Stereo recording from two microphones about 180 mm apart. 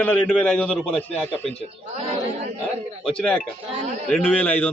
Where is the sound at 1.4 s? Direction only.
35° right (ahead or behind).